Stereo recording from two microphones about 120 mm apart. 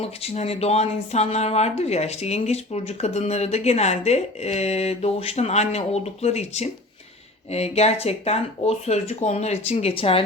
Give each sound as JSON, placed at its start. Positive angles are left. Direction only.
{"t": 0.0, "sound": "speech", "side_deg": 55}